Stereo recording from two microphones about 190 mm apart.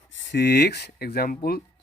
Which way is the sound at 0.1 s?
75° left (ahead or behind).